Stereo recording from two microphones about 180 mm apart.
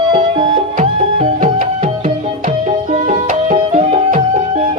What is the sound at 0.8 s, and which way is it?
Music, 45° right (ahead or behind).